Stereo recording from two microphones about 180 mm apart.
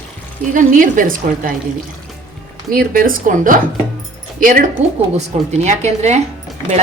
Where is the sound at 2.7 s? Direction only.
55° right (ahead or behind).